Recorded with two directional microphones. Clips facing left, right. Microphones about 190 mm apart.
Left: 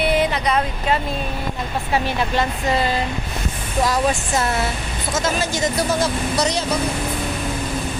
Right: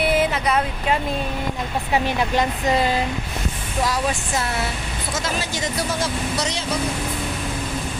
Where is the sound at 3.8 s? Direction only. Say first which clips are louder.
Left 4 dB; 45° left (ahead or behind).